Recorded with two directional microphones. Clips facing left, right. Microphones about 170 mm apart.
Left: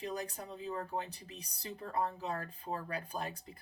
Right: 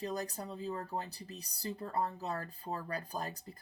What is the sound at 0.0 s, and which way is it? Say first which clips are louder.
Speech: right 2 dB; 35° right (ahead or behind).